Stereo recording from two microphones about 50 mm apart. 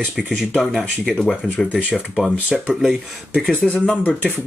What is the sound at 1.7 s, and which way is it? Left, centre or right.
Speech, centre.